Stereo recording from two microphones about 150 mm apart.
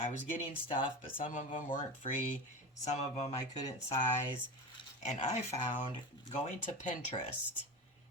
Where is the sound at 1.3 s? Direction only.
60° left (ahead or behind).